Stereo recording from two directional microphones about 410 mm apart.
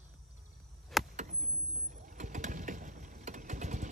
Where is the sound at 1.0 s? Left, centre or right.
Centre.